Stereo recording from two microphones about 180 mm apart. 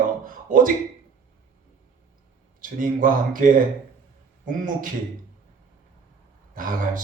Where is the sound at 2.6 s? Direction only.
50° right (ahead or behind).